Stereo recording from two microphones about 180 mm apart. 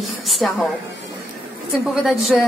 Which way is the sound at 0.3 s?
Centre (ahead or behind).